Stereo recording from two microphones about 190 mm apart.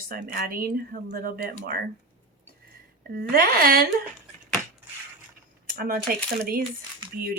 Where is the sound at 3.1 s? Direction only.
55° right (ahead or behind).